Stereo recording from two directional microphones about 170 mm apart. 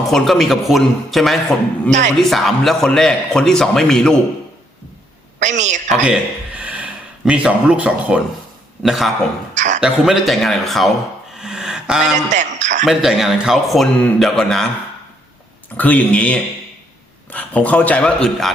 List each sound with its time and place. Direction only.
0.1 s a man's voice: centre (ahead or behind)
5.4 s a woman's voice: 45° right (ahead or behind)
6.1 s a man's voice: 10° right (ahead or behind)
9.6 s speech: 45° right (ahead or behind)
9.8 s a man's voice: centre (ahead or behind)
11.3 s a sound: 5° right (ahead or behind)
12.3 s a sound: 45° right (ahead or behind)
12.8 s a man's voice: 5° right (ahead or behind)
15.8 s a man's voice: 10° left (ahead or behind)